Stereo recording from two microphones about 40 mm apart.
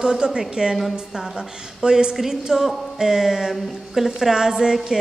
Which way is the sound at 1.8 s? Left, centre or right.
Centre.